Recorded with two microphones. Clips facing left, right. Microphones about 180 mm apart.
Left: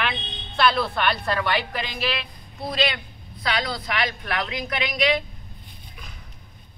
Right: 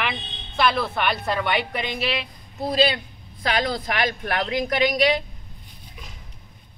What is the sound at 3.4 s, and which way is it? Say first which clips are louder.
A woman's voice: right 3 dB; 50° right (ahead or behind).